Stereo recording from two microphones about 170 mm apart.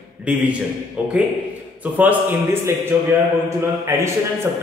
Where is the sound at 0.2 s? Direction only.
10° right (ahead or behind).